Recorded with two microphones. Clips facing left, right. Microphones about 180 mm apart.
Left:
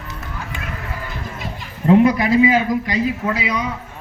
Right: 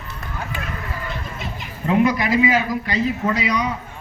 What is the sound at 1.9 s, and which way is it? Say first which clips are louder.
Speech: left 5 dB; 30° left (ahead or behind).